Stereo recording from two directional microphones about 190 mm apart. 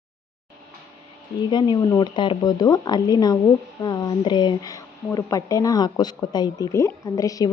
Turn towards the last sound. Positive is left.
turn(degrees=20)  # may be behind; listen again after turning